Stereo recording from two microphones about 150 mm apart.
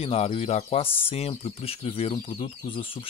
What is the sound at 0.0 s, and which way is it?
Speech, 40° left (ahead or behind).